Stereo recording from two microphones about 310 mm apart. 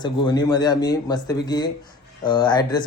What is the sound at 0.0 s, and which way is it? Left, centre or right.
Speech, centre.